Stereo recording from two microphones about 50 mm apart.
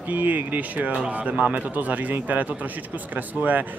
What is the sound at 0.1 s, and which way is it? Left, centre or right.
Speech, right.